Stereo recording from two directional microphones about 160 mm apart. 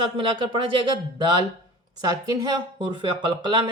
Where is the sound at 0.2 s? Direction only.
30° right (ahead or behind).